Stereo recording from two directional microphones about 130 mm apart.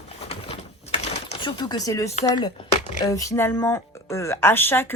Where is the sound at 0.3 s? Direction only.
50° left (ahead or behind).